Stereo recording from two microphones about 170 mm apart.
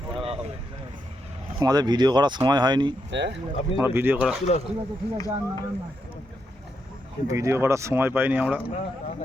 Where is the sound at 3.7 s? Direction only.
15° right (ahead or behind).